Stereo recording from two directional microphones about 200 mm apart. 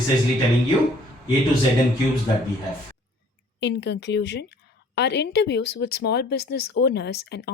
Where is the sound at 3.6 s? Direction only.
60° left (ahead or behind).